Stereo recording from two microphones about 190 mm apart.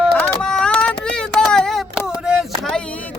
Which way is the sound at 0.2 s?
5° left (ahead or behind).